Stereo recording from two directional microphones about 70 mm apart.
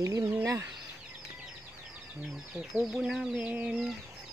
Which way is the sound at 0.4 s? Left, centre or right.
Right.